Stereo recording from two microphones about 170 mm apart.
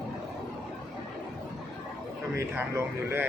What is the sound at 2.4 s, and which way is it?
Speech, 15° right (ahead or behind).